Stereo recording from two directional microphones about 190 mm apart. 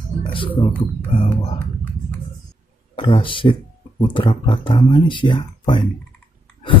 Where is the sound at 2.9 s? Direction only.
25° left (ahead or behind).